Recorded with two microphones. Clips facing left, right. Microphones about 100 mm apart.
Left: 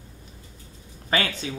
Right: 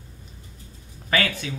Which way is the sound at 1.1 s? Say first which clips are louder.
Right 1 dB; 25° left (ahead or behind).